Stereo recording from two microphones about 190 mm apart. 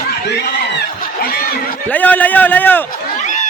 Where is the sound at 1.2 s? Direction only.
50° left (ahead or behind).